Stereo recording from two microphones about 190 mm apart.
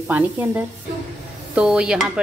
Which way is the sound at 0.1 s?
10° right (ahead or behind).